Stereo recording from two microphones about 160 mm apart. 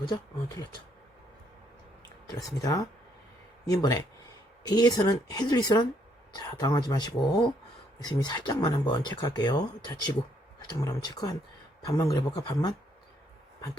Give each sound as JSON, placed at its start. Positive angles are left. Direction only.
{"t": 0.0, "sound": "speech", "side_deg": 25}
{"t": 2.6, "sound": "speech", "side_deg": 20}